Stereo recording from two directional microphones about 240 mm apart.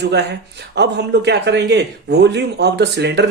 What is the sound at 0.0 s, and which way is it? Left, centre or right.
Speech, right.